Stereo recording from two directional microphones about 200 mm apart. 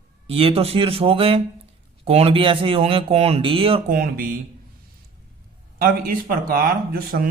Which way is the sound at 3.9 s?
45° right (ahead or behind).